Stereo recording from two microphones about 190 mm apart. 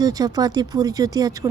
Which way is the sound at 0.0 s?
20° right (ahead or behind).